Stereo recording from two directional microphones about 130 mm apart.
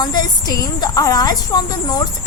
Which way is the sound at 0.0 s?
35° left (ahead or behind).